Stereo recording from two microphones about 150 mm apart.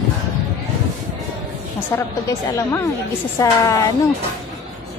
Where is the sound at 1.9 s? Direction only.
20° left (ahead or behind).